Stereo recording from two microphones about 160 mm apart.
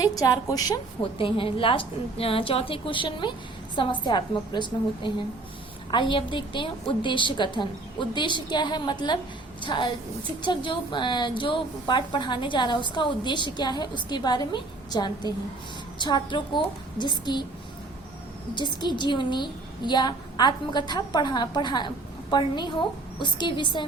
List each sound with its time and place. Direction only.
0.0 s a woman's voice: 20° left (ahead or behind)
1.2 s a woman's voice: 35° left (ahead or behind)
18.5 s a woman's voice: 30° left (ahead or behind)